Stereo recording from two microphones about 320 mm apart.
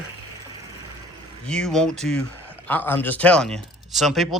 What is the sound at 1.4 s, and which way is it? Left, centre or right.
Speech, centre.